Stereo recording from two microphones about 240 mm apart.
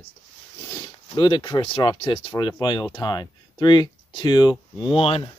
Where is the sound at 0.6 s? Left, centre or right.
Centre.